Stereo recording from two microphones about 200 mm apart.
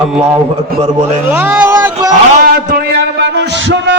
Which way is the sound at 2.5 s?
50° right (ahead or behind).